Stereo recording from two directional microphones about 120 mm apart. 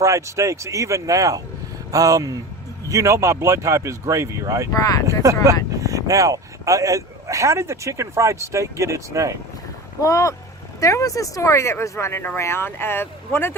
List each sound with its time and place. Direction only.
0.0 s speech: 25° right (ahead or behind)
4.7 s speech: 30° left (ahead or behind)
5.8 s speech: 30° right (ahead or behind)
10.0 s speech: 25° left (ahead or behind)